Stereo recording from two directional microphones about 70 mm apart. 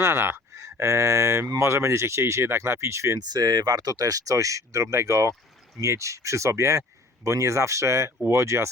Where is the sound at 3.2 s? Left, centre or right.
Right.